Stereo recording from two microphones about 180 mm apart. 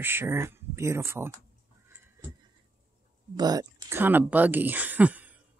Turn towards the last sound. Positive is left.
turn(degrees=-10)  # may be behind; listen again after turning